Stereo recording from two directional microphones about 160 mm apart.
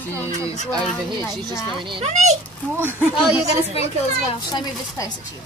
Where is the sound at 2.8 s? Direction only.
10° right (ahead or behind).